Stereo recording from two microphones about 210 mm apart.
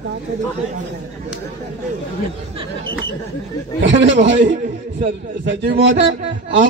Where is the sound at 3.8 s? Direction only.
60° right (ahead or behind).